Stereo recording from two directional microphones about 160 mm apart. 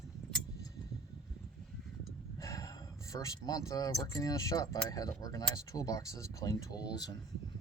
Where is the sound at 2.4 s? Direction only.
20° left (ahead or behind).